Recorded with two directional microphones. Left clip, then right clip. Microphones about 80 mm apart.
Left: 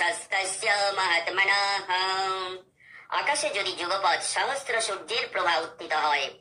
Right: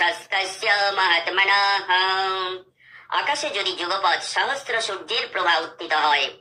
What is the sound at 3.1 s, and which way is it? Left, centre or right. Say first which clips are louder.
A woman's voice: right 3 dB; right.